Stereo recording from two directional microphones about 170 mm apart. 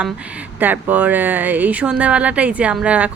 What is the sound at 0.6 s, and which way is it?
A woman's voice, 10° right (ahead or behind).